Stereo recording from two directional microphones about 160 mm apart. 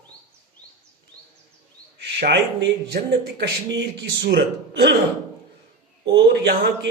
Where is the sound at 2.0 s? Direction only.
90° right.